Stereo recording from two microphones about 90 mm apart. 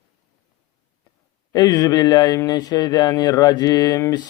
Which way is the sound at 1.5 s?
50° left (ahead or behind).